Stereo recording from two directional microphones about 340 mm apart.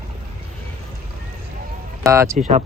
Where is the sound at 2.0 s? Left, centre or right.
Centre.